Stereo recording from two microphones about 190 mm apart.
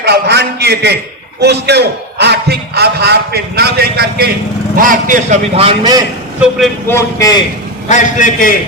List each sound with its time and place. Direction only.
0.0 s a man's voice: 60° right (ahead or behind)
4.8 s a man's voice: 45° right (ahead or behind); by 6.0 s 25° right (ahead or behind)
6.8 s a man's voice: 15° left (ahead or behind)
7.9 s a man's voice: 40° left (ahead or behind)